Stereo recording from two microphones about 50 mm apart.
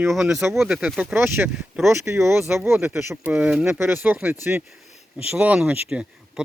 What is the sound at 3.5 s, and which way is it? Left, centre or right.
Speech, centre.